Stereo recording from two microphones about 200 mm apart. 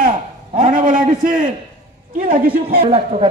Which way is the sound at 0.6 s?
40° right (ahead or behind).